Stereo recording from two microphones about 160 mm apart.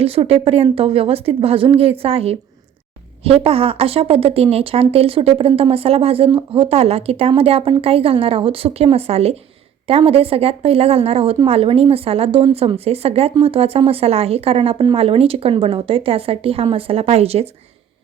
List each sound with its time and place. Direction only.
0.0 s speech: 40° right (ahead or behind)